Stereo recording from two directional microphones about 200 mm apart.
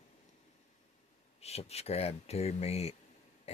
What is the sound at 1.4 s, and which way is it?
Speech, 30° left (ahead or behind).